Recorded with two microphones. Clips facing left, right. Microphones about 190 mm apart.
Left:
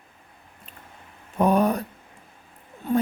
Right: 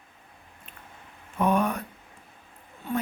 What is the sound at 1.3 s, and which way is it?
Speech, 35° left (ahead or behind).